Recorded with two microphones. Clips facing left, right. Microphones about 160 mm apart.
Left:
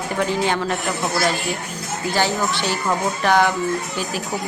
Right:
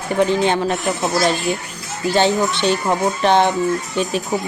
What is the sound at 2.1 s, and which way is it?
A woman's voice, 25° right (ahead or behind).